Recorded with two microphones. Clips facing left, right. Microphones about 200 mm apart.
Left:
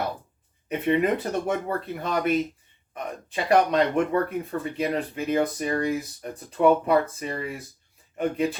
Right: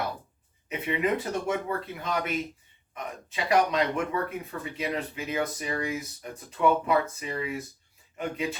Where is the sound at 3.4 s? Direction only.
50° left (ahead or behind).